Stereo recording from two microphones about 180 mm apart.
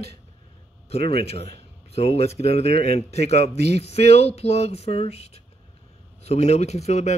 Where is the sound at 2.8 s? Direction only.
35° left (ahead or behind).